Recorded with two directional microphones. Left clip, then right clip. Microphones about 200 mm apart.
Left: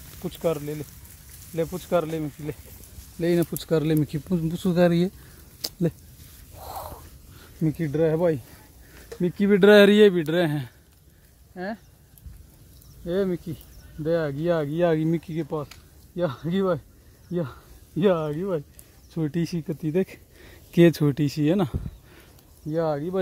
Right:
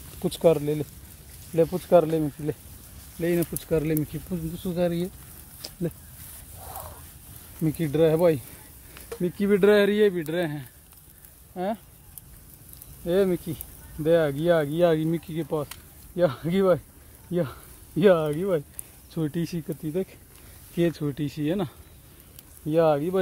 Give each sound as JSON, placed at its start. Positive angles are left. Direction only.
{"t": 0.2, "sound": "speech", "side_deg": -25}
{"t": 1.9, "sound": "speech", "side_deg": -15}
{"t": 3.2, "sound": "speech", "side_deg": 30}
{"t": 6.6, "sound": "zipper", "side_deg": 55}
{"t": 7.6, "sound": "speech", "side_deg": 15}
{"t": 9.2, "sound": "speech", "side_deg": 45}
{"t": 11.5, "sound": "speech", "side_deg": 5}
{"t": 13.0, "sound": "speech", "side_deg": 15}
{"t": 14.5, "sound": "speech", "side_deg": 25}
{"t": 16.2, "sound": "speech", "side_deg": 15}
{"t": 19.1, "sound": "speech", "side_deg": 30}
{"t": 19.9, "sound": "speech", "side_deg": 50}
{"t": 22.7, "sound": "speech", "side_deg": 10}